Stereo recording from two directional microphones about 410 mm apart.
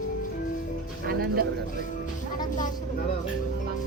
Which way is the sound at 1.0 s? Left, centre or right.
Right.